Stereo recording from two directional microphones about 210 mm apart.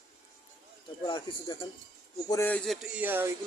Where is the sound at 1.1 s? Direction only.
20° left (ahead or behind).